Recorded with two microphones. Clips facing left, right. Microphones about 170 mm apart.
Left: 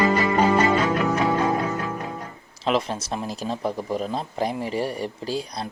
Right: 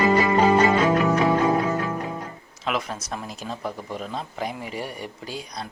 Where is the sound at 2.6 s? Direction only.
30° left (ahead or behind).